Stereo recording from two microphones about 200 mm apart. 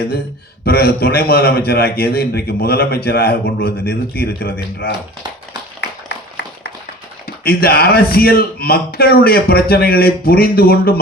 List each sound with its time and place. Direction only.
0.6 s a man's voice: 50° left (ahead or behind)
6.1 s a sound: 55° left (ahead or behind)
7.4 s a man's voice: 50° left (ahead or behind)